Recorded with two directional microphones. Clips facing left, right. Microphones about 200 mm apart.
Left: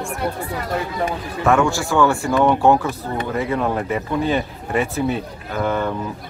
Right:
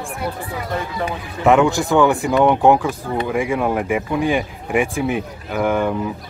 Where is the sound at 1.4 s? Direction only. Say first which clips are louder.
Right 3 dB; 20° right (ahead or behind).